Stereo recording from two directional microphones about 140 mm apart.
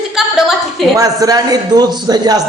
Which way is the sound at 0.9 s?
25° right (ahead or behind).